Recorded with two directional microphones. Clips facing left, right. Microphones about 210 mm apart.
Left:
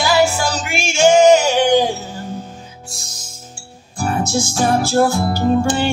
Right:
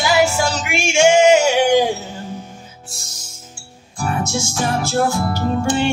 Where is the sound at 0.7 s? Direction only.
15° right (ahead or behind).